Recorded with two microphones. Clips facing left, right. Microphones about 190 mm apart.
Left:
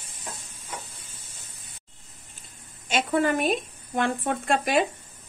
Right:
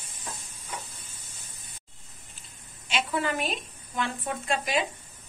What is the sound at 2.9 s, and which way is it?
Speech, 45° left (ahead or behind).